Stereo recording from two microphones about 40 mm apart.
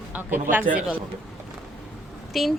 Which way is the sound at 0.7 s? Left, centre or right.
Right.